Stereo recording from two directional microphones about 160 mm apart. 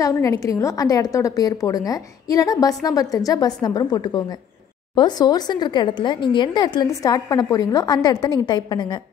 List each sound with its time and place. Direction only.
0.0 s a woman's voice: 20° left (ahead or behind)